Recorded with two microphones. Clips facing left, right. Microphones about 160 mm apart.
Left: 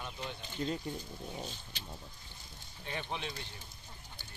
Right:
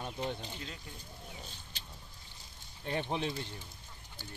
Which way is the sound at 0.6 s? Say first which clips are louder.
Left 11 dB; 40° left (ahead or behind).